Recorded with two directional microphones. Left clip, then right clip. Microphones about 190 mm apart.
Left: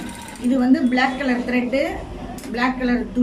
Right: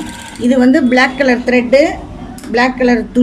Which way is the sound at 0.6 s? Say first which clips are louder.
Right 8 dB; 55° right (ahead or behind).